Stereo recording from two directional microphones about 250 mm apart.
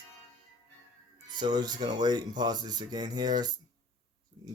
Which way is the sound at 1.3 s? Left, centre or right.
Centre.